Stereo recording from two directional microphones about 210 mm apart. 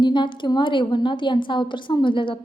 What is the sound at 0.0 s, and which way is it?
A woman's voice, 20° left (ahead or behind).